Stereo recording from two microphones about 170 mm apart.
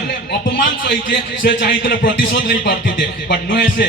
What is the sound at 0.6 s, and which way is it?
A man's voice, 75° left (ahead or behind).